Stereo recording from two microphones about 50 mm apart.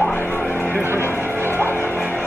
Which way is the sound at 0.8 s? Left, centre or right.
Right.